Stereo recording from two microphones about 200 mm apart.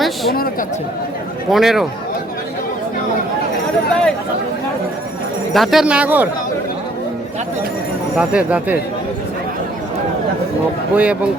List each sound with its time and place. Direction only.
1.5 s speech: centre (ahead or behind)
5.5 s speech: 5° right (ahead or behind)
8.1 s speech: 5° right (ahead or behind)
10.9 s speech: 5° right (ahead or behind)